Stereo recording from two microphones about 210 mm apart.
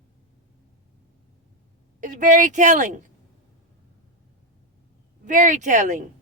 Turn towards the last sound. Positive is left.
turn(degrees=-35)  # may be behind; listen again after turning